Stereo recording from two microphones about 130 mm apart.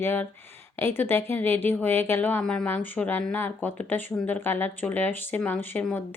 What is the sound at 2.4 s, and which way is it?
A woman's voice, 5° left (ahead or behind).